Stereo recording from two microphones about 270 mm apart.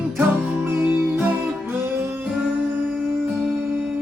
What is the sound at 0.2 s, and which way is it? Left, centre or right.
Music, centre.